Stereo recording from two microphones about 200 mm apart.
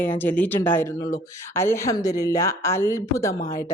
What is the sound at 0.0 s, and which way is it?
Speech, 10° left (ahead or behind).